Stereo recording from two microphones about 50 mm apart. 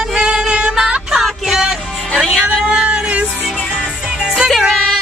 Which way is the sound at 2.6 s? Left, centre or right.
Centre.